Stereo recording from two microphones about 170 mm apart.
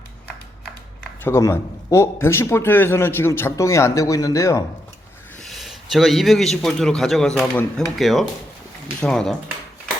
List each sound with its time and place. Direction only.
1.2 s speech: 15° left (ahead or behind)
5.4 s a man's voice: centre (ahead or behind)